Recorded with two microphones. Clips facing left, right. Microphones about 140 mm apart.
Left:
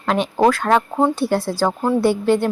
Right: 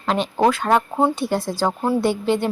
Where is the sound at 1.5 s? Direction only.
15° right (ahead or behind).